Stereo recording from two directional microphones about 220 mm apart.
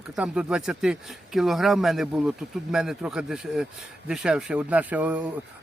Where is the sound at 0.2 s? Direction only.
5° right (ahead or behind).